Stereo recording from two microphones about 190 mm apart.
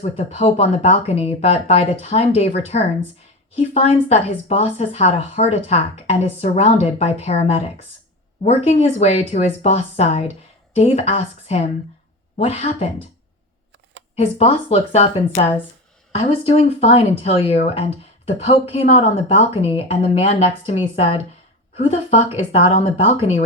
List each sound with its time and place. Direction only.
0.0 s speech: 30° left (ahead or behind)
14.2 s speech: 30° left (ahead or behind)